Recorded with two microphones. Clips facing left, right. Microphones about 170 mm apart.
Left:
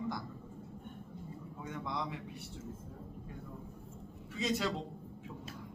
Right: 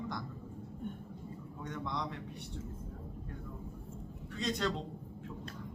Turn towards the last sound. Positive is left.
turn(degrees=5)  # may be behind; listen again after turning